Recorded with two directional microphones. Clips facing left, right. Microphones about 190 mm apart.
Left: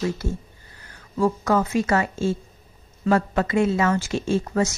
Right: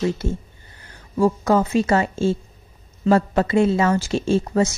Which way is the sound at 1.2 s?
30° right (ahead or behind).